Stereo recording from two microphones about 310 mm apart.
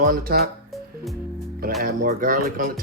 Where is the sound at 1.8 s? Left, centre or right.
Right.